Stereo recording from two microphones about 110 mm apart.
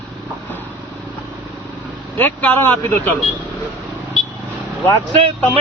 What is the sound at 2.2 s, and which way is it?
Speech, 15° left (ahead or behind).